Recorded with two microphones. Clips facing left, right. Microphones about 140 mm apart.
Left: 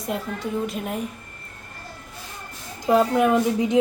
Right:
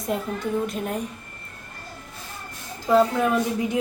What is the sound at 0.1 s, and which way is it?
Speech, centre (ahead or behind).